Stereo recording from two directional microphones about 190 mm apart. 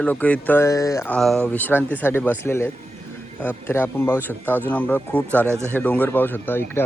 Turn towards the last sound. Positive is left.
turn(degrees=10)  # may be behind; listen again after turning